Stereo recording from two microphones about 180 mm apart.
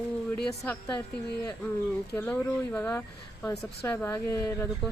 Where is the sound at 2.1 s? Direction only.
10° left (ahead or behind).